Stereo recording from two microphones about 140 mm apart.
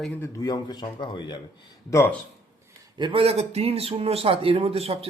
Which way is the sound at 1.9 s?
15° left (ahead or behind).